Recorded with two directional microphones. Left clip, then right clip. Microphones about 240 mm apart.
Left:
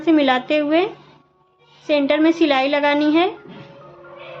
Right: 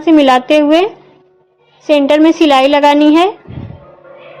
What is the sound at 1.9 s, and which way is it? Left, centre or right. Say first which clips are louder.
A woman's voice: right 8 dB; right.